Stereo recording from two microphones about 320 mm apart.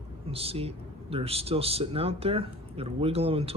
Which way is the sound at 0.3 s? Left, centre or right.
Centre.